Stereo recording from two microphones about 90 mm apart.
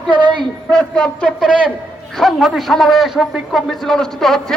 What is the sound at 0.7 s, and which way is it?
Speech, 10° left (ahead or behind).